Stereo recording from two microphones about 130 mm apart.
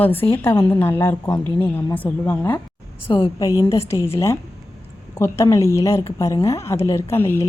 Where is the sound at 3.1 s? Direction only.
30° left (ahead or behind).